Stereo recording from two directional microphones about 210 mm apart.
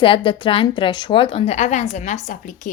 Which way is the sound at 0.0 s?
25° left (ahead or behind).